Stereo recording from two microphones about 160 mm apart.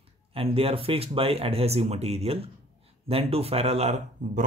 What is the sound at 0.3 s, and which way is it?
Speech, 35° right (ahead or behind).